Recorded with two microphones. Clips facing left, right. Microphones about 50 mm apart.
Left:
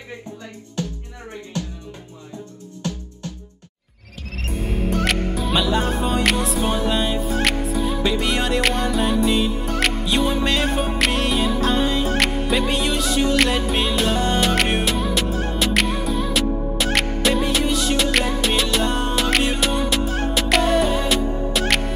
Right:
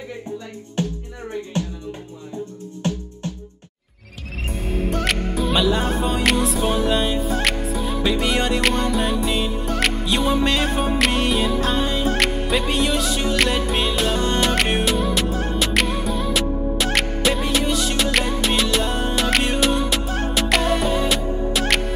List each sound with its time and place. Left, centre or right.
0.8 s music: right
2.8 s music: right
4.5 s music: centre